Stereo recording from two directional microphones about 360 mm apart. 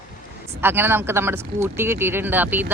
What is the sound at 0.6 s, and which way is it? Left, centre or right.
Speech, centre.